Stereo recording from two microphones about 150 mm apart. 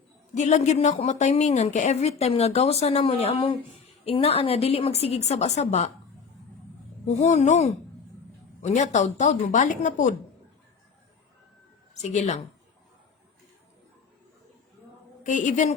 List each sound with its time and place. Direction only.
0.3 s speech: 50° left (ahead or behind)
7.0 s speech: 50° left (ahead or behind)
11.9 s speech: 50° left (ahead or behind)
15.2 s a woman's voice: 55° left (ahead or behind)